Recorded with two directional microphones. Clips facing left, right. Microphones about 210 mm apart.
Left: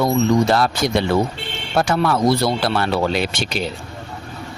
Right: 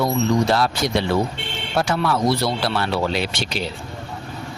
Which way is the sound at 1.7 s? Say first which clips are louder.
Left 3 dB; 50° left (ahead or behind).